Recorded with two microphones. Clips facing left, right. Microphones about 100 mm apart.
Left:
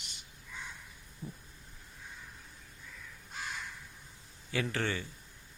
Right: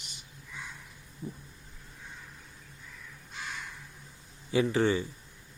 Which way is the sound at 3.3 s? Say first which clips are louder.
Even; 45° left (ahead or behind).